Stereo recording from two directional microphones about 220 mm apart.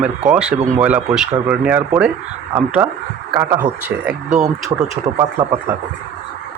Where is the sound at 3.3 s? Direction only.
15° right (ahead or behind).